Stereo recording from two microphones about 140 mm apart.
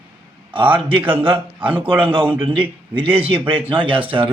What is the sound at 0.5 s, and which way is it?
Speech, 40° right (ahead or behind).